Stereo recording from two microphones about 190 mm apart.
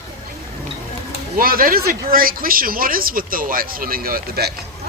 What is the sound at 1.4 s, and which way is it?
Speech, 50° right (ahead or behind).